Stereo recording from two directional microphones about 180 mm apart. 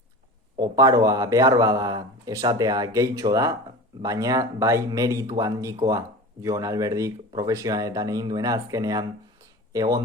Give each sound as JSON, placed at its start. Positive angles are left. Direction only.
{"t": 0.6, "sound": "speech", "side_deg": -20}